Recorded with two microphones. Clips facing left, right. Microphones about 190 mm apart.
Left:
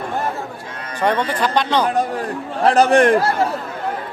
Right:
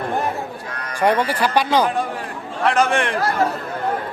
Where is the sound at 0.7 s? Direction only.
25° left (ahead or behind).